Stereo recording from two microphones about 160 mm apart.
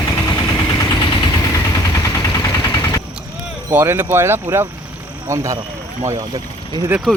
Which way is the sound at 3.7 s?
10° right (ahead or behind).